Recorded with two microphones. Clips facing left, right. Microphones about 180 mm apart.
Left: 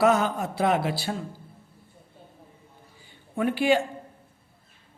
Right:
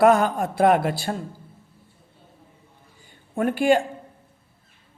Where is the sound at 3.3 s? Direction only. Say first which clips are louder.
Right 3 dB; 45° right (ahead or behind).